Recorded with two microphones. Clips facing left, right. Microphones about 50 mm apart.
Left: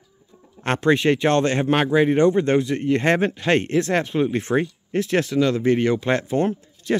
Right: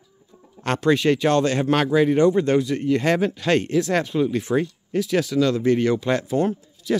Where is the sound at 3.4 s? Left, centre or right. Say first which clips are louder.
Left 1 dB; left.